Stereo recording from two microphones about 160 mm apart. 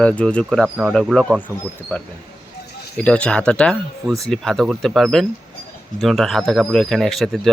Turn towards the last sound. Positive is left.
turn(degrees=0)  # may be behind; listen again after turning